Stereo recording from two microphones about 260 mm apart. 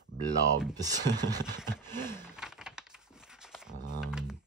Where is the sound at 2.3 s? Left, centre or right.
Centre.